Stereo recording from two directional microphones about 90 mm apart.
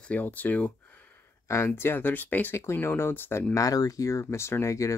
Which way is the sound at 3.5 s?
40° left (ahead or behind).